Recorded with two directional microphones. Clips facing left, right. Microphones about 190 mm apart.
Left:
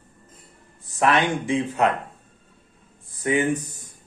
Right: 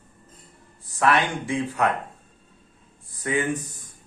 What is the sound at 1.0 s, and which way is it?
Speech, 20° left (ahead or behind).